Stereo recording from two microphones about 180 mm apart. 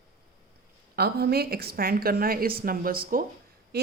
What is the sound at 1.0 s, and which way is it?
A woman's voice, 60° right (ahead or behind).